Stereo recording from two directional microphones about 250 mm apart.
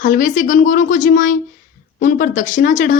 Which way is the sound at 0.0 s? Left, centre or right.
Left.